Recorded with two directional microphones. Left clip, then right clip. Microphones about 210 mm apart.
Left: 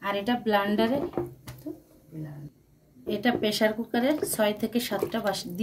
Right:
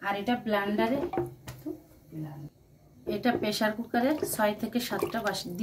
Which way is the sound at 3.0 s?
25° left (ahead or behind).